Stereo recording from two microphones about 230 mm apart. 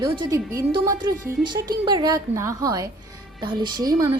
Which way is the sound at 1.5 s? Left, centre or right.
Centre.